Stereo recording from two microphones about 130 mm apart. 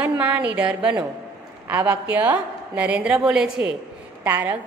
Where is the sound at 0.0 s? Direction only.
10° right (ahead or behind).